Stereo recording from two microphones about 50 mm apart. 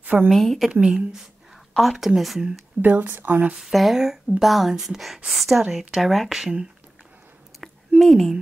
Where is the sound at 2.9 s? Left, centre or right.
Right.